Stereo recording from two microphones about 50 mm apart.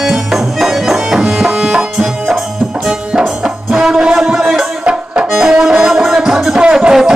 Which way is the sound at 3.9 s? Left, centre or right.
Centre.